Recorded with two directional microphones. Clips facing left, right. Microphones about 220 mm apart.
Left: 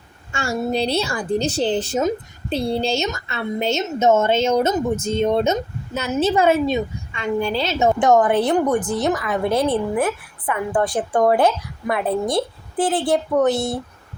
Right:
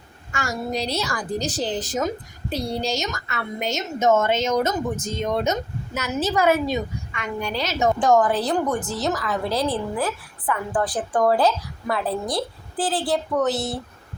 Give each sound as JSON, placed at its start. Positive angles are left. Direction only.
{"t": 0.3, "sound": "a woman's voice", "side_deg": 30}